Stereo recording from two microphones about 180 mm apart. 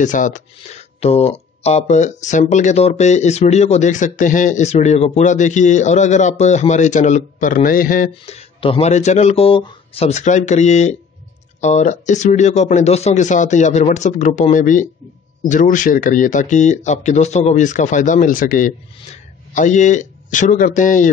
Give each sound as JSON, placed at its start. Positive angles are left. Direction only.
{"t": 0.0, "sound": "speech", "side_deg": 45}